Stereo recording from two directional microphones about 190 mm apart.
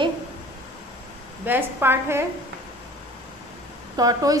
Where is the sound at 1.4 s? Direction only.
10° right (ahead or behind).